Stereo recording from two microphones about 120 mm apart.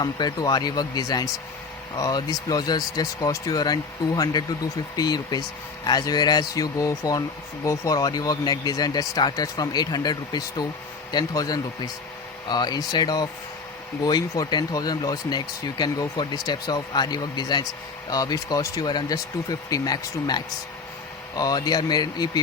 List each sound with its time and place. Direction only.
0.0 s speech: 35° left (ahead or behind)